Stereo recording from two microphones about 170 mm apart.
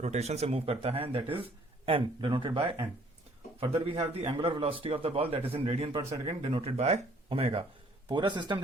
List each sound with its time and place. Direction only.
0.0 s a man's voice: 40° right (ahead or behind)